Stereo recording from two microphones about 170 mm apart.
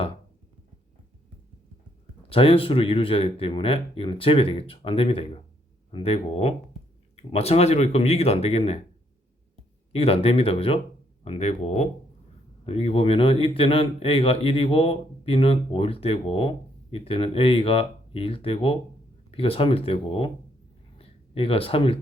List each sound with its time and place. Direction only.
2.3 s speech: 35° left (ahead or behind)
9.9 s speech: 35° left (ahead or behind)
21.0 s a sound: 35° left (ahead or behind)